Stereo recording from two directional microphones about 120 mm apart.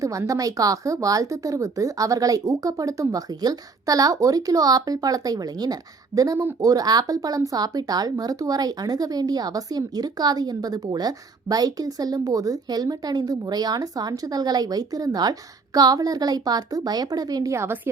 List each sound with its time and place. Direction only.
0.0 s a woman's voice: 25° right (ahead or behind)